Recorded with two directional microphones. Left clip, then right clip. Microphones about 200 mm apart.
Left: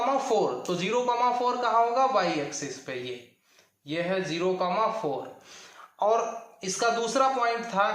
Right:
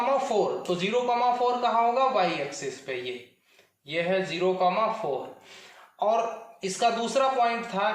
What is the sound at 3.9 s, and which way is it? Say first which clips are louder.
Speech: right 2 dB; 25° left (ahead or behind).